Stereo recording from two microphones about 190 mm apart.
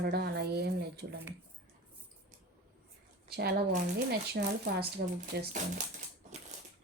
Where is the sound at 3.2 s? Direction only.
55° right (ahead or behind).